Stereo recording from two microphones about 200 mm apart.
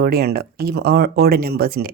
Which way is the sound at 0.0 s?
50° right (ahead or behind).